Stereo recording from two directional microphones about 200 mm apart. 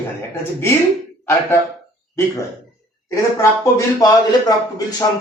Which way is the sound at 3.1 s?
15° left (ahead or behind).